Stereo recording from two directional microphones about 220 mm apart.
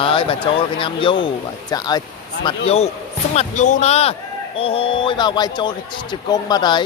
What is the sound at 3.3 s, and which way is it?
A man's voice, 35° left (ahead or behind).